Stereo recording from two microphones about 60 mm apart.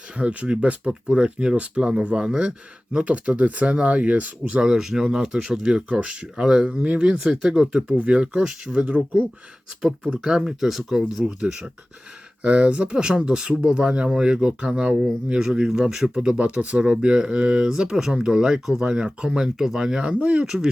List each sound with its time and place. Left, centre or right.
0.2 s speech: right
6.7 s speech: centre
20.4 s speech: centre